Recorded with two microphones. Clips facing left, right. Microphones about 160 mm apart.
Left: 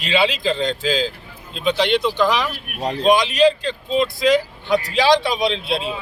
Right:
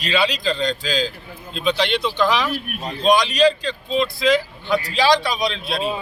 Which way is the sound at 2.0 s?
15° left (ahead or behind).